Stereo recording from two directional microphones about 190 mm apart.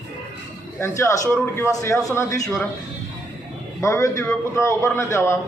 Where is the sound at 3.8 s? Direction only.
15° left (ahead or behind).